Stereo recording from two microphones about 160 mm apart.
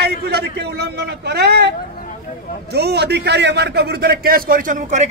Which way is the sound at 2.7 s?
90° right.